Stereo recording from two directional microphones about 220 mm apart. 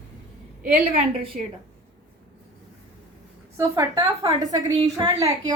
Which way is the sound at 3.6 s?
15° right (ahead or behind).